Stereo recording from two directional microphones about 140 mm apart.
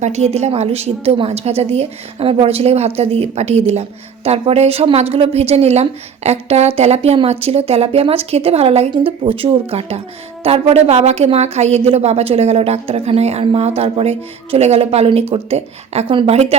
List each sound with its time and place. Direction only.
0.0 s a woman's voice: 50° right (ahead or behind)